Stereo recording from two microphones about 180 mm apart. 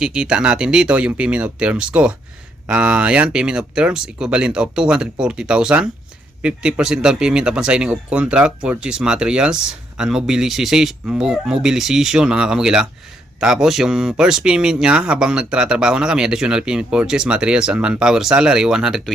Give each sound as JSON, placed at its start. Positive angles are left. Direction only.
{"t": 0.0, "sound": "speech", "side_deg": -5}